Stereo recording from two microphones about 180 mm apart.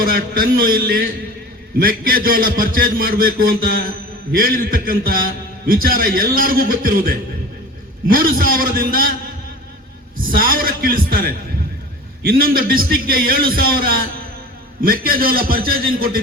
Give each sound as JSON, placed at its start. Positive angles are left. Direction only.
{"t": 0.0, "sound": "a man's voice", "side_deg": -55}
{"t": 10.2, "sound": "a man's voice", "side_deg": -50}